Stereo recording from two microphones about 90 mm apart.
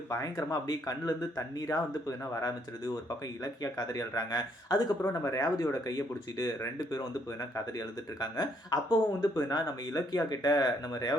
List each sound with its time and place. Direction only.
0.1 s speech: 35° left (ahead or behind)